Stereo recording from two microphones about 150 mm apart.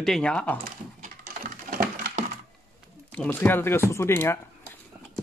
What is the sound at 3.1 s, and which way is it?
Speech, 10° left (ahead or behind).